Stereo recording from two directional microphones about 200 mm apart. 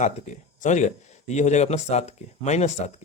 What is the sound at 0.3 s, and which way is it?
A man's voice, 35° left (ahead or behind).